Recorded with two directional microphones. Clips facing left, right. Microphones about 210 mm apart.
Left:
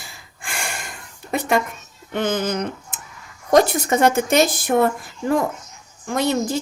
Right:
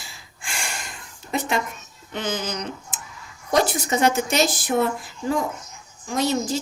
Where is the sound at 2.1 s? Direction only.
55° left (ahead or behind).